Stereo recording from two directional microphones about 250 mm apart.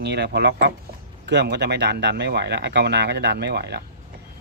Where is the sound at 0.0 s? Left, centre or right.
Right.